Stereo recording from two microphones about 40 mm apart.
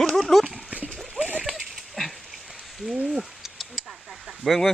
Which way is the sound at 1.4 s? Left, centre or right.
Centre.